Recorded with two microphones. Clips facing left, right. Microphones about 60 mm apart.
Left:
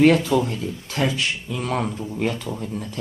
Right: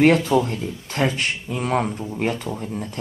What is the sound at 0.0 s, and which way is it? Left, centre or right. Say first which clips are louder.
Speech: even; right.